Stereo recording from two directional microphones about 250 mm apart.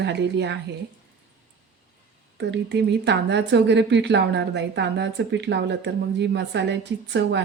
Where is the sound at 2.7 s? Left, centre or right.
Right.